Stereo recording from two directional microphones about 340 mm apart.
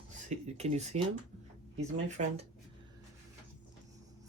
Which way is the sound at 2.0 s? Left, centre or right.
Right.